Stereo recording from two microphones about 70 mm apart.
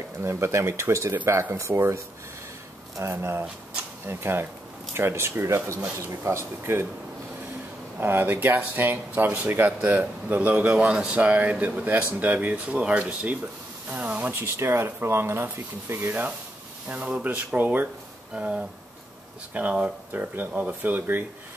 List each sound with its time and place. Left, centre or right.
0.2 s speech: right
1.1 s speech: right
3.0 s speech: right
8.0 s speech: right
10.7 s speech: centre; by 16.3 s right
16.8 s speech: centre